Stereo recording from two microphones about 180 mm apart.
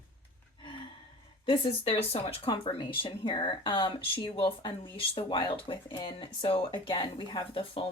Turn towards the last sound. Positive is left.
turn(degrees=30)  # may be behind; listen again after turning